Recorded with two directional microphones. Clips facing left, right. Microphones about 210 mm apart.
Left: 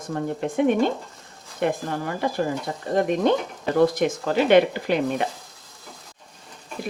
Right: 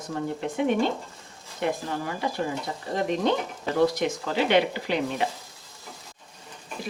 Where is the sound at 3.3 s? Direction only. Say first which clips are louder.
Left 4 dB; 50° left (ahead or behind).